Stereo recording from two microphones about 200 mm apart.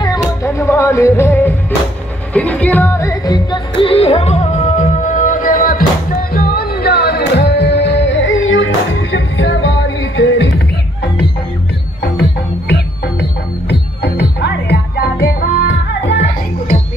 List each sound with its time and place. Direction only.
0.0 s music: 20° left (ahead or behind); by 10.6 s 65° left (ahead or behind)
12.0 s music: 55° left (ahead or behind)
16.0 s music: 65° left (ahead or behind)